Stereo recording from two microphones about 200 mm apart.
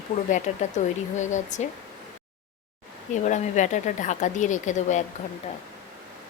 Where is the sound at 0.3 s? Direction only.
40° left (ahead or behind).